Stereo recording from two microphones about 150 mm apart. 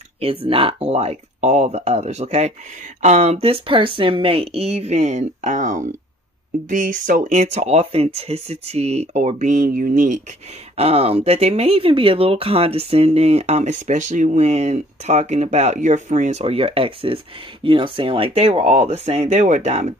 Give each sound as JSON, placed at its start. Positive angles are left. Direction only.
{"t": 0.2, "sound": "speech", "side_deg": -35}
{"t": 10.8, "sound": "speech", "side_deg": -40}